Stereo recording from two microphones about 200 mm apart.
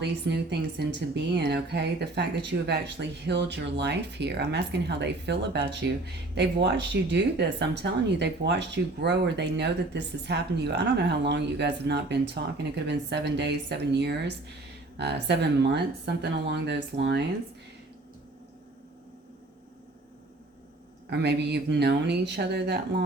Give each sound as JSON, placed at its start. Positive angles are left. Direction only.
{"t": 0.8, "sound": "speech", "side_deg": -60}
{"t": 21.1, "sound": "speech", "side_deg": -55}